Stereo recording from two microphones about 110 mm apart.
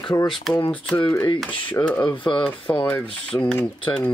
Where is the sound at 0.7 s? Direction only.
10° left (ahead or behind).